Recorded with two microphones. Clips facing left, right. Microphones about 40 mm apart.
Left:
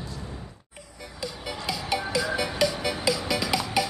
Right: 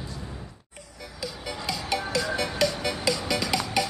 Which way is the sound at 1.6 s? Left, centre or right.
Centre.